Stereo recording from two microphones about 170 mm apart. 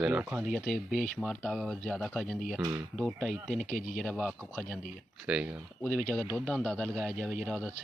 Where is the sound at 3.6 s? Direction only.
50° left (ahead or behind).